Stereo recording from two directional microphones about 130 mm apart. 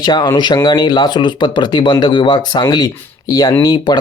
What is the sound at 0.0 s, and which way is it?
Speech, 30° left (ahead or behind).